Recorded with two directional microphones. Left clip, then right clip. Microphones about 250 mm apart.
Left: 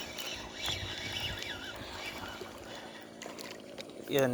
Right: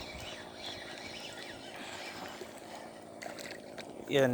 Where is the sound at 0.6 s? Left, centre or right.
Left.